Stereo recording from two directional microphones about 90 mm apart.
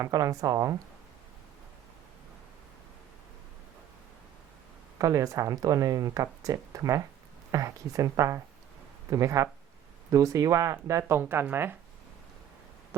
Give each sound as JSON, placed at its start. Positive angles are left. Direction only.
{"t": 0.0, "sound": "speech", "side_deg": -40}
{"t": 4.9, "sound": "speech", "side_deg": -40}